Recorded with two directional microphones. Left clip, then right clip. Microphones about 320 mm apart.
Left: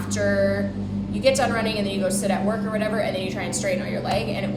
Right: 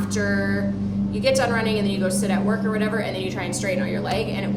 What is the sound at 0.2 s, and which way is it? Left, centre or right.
A woman's voice, centre.